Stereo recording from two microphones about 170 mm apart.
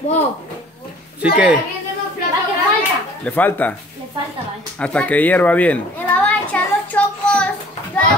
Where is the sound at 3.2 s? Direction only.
10° left (ahead or behind).